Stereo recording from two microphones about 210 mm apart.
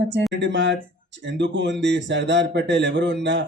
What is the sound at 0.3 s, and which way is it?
A man's voice, 55° right (ahead or behind).